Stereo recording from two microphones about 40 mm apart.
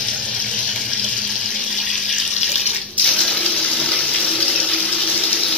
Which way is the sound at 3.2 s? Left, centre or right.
Centre.